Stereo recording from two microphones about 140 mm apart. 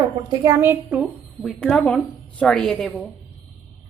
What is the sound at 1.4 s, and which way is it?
A woman's voice, 5° left (ahead or behind).